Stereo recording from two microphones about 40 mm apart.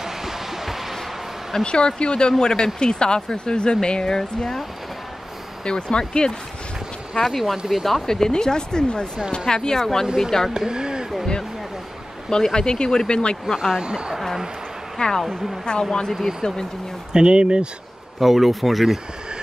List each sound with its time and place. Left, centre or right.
0.0 s a sound: centre
1.5 s speech: left
5.7 s speech: left
7.2 s speech: centre
7.5 s speech: centre
7.8 s speech: centre
8.2 s speech: centre
10.5 s speech: centre
12.3 s speech: centre
13.6 s speech: centre
15.0 s speech: centre
16.1 s speech: centre
17.1 s speech: right
18.2 s speech: centre